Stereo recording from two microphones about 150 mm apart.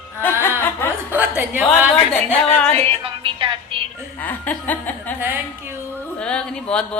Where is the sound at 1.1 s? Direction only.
10° right (ahead or behind).